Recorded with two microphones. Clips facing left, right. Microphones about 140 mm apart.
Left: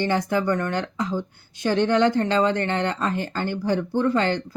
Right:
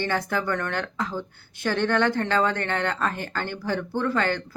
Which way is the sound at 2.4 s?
50° right (ahead or behind).